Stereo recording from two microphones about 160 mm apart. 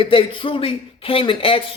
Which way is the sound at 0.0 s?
35° left (ahead or behind).